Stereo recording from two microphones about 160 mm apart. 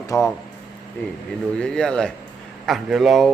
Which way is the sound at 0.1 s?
20° left (ahead or behind).